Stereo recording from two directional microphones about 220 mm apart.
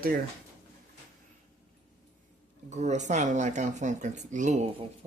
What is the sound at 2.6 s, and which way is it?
Speech, 30° right (ahead or behind).